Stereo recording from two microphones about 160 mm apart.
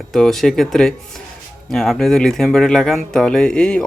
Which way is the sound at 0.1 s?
Centre (ahead or behind).